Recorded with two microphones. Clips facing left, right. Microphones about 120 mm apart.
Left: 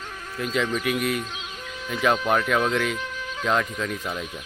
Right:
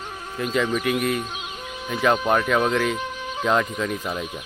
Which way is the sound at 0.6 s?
15° right (ahead or behind).